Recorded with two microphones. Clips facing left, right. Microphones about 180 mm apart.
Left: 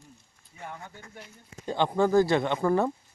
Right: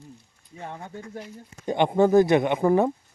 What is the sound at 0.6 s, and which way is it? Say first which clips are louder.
Speech: right 5 dB; 30° right (ahead or behind).